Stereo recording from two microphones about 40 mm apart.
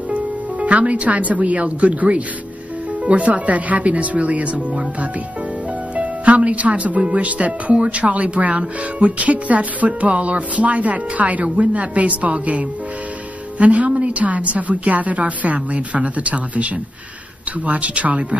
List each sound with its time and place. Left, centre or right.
0.1 s speech: right
5.9 s speech: right